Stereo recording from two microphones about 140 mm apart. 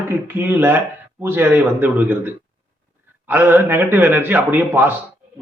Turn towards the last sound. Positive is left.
turn(degrees=-15)  # may be behind; listen again after turning